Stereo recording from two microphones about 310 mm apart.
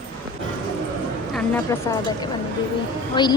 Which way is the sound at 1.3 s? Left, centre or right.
Centre.